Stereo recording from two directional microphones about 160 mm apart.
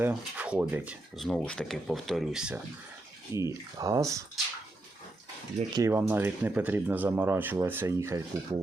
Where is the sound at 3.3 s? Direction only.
20° right (ahead or behind).